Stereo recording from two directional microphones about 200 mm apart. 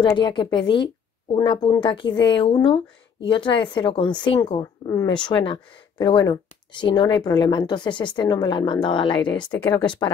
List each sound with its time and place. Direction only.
0.0 s speech: 20° left (ahead or behind)